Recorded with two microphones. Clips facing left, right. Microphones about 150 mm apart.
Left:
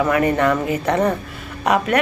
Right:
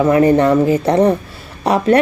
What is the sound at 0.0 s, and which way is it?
Speech, 30° right (ahead or behind).